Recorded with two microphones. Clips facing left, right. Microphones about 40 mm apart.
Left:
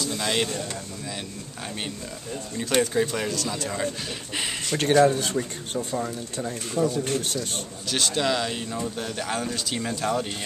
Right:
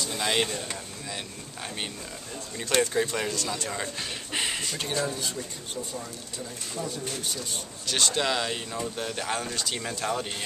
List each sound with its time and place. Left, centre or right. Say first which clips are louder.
0.1 s speech: right 1 dB; centre
2.5 s speech: left 2 dB; centre
4.6 s speech: left 11 dB; left
7.9 s speech: left 2 dB; centre